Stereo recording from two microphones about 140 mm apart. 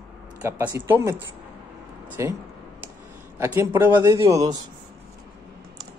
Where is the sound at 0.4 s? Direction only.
20° right (ahead or behind).